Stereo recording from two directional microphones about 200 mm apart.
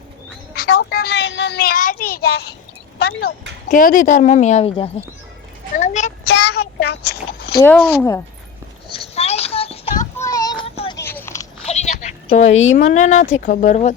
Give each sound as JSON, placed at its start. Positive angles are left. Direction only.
{"t": 0.5, "sound": "a child's voice", "side_deg": 55}
{"t": 3.7, "sound": "speech", "side_deg": 40}
{"t": 5.7, "sound": "a sound", "side_deg": 35}
{"t": 6.2, "sound": "child singing", "side_deg": 60}
{"t": 6.8, "sound": "speech", "side_deg": 55}
{"t": 7.6, "sound": "speech", "side_deg": 10}
{"t": 9.1, "sound": "a sound", "side_deg": 30}
{"t": 10.2, "sound": "child singing", "side_deg": 15}
{"t": 11.0, "sound": "biting", "side_deg": 10}
{"t": 11.6, "sound": "a sound", "side_deg": 35}
{"t": 12.5, "sound": "speech", "side_deg": 75}
{"t": 12.7, "sound": "speech", "side_deg": 35}